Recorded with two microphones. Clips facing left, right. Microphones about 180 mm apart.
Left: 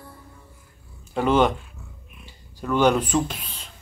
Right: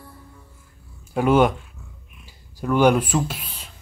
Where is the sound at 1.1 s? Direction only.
10° right (ahead or behind).